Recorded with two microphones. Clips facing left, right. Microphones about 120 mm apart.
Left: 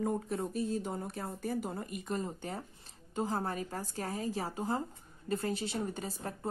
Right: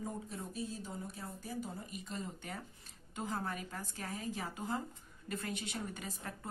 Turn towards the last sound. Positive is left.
turn(degrees=30)  # may be behind; listen again after turning